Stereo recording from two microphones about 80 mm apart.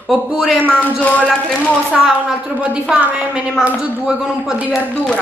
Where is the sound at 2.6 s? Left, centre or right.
Centre.